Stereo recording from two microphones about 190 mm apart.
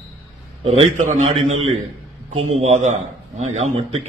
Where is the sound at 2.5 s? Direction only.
35° right (ahead or behind).